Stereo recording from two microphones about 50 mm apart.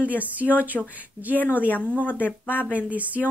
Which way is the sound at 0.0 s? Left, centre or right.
Right.